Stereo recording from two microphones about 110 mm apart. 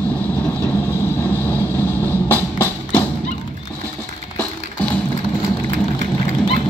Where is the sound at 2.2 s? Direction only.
20° left (ahead or behind).